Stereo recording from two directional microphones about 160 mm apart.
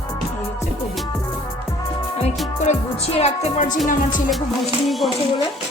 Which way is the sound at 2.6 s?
40° left (ahead or behind).